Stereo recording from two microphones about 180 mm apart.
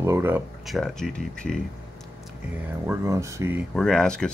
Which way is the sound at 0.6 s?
Centre (ahead or behind).